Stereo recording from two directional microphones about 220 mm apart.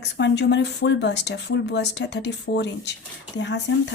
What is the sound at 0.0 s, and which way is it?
Speech, 50° left (ahead or behind).